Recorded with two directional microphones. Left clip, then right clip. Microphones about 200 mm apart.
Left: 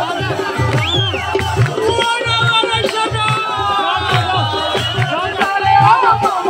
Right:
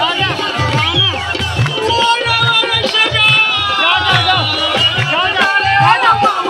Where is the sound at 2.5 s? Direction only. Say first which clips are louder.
Right 2 dB; 55° left (ahead or behind).